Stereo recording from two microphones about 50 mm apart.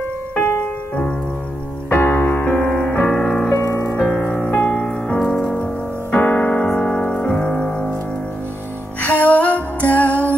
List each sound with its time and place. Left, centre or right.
0.4 s music: left
1.9 s music: left
3.5 s music: left
4.1 s music: left
6.1 s music: left
6.4 s piano: left
9.0 s music: left